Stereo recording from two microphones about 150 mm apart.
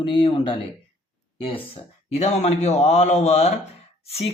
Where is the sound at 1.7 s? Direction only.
45° left (ahead or behind).